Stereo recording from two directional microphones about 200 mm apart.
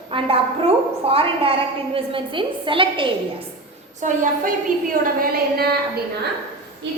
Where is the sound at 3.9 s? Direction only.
40° right (ahead or behind).